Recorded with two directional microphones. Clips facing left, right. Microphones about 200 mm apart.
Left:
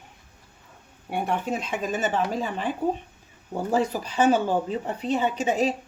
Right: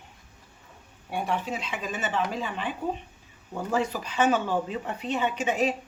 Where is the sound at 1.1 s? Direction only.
55° left (ahead or behind); by 5.8 s 35° left (ahead or behind).